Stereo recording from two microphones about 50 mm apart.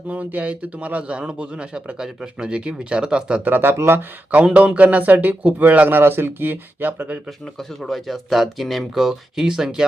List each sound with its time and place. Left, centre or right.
0.1 s a man's voice: right
3.4 s speech: right
3.8 s speech: right
4.3 s a man's voice: right
6.0 s speech: right
7.8 s speech: centre